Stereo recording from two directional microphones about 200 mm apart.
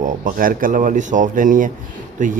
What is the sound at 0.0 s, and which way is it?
Speech, 40° right (ahead or behind).